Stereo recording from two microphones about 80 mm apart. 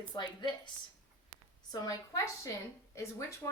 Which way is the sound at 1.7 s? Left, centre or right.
Left.